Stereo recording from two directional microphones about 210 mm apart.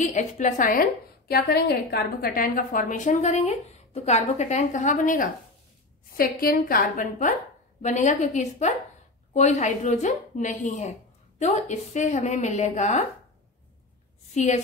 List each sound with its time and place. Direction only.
0.0 s a woman's voice: 35° left (ahead or behind)
14.3 s a woman's voice: 35° left (ahead or behind)